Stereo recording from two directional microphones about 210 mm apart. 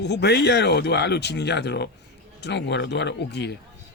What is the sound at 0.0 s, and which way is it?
Speech, 55° left (ahead or behind).